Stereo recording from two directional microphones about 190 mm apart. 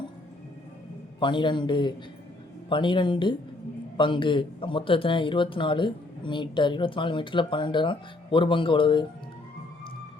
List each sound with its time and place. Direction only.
1.2 s speech: 25° left (ahead or behind)